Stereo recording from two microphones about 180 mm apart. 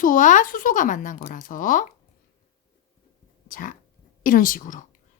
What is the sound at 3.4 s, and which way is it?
A woman's voice, 50° left (ahead or behind).